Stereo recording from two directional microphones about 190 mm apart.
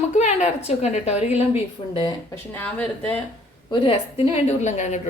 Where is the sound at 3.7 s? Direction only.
30° left (ahead or behind).